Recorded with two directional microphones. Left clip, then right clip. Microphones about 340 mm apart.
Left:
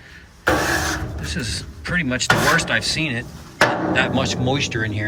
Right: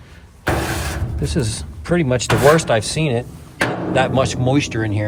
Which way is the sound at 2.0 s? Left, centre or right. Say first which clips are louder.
Right 1 dB; centre.